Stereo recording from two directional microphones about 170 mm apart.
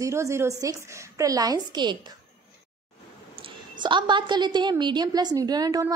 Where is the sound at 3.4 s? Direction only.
30° right (ahead or behind).